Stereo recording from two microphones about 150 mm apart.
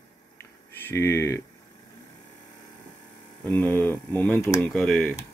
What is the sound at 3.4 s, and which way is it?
Speech, 10° left (ahead or behind).